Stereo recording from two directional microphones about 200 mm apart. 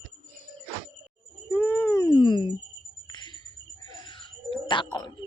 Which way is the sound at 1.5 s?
10° left (ahead or behind).